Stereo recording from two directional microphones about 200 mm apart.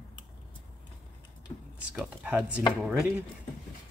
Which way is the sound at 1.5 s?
25° left (ahead or behind).